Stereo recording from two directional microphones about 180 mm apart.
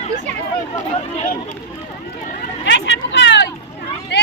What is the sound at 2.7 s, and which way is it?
Speech, 75° left (ahead or behind).